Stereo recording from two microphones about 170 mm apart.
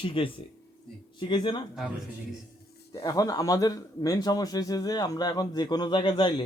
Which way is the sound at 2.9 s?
20° left (ahead or behind).